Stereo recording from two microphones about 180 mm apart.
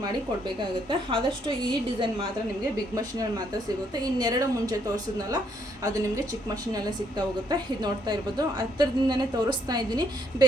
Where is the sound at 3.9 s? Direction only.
20° right (ahead or behind).